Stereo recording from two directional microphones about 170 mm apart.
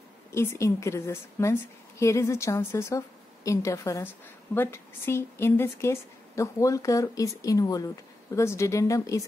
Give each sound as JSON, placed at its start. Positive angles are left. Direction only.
{"t": 0.3, "sound": "a woman's voice", "side_deg": 15}